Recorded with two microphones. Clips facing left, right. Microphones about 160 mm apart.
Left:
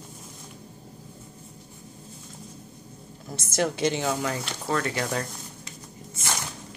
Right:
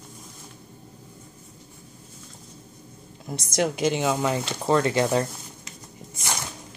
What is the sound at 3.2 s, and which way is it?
Speech, 15° right (ahead or behind).